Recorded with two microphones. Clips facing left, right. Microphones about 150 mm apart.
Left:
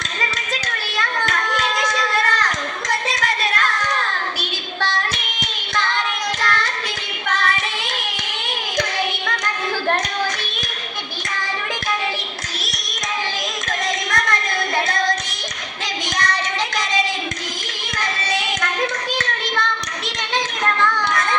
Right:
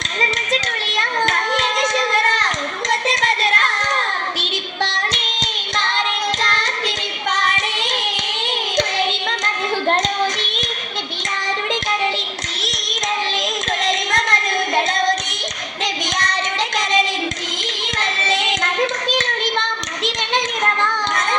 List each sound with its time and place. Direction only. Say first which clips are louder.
0.2 s child singing: right 5 dB; 20° right (ahead or behind)
3.1 s a sound: right 3 dB; 20° right (ahead or behind)
4.4 s hands: right 3 dB; 20° right (ahead or behind)
6.4 s child singing: even; 20° right (ahead or behind)
13.8 s a sound: right 1 dB; 20° right (ahead or behind)
14.8 s music: right 2 dB; 20° right (ahead or behind)
16.1 s child singing: left 3 dB; 20° right (ahead or behind)
18.0 s hands: right 2 dB; 20° right (ahead or behind)
20.8 s children playing: left 1 dB; 20° right (ahead or behind)